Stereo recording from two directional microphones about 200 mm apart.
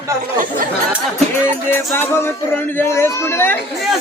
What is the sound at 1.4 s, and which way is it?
Speech, 10° left (ahead or behind).